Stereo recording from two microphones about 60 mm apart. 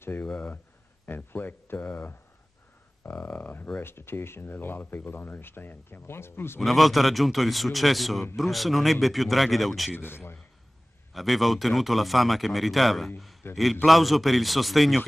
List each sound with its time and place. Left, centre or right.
1.0 s speech: left
3.8 s speech: left
6.6 s a man's voice: centre
9.9 s speech: left
11.1 s a man's voice: centre
13.4 s speech: left
13.8 s a man's voice: centre